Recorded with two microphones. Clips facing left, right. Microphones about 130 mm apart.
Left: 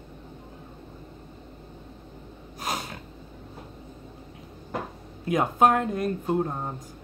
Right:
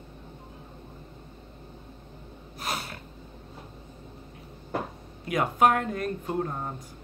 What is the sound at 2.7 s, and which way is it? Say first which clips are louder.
Snort: left 2 dB; 20° left (ahead or behind).